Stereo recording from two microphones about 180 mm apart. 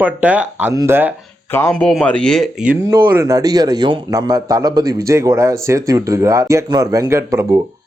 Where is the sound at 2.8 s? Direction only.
15° right (ahead or behind).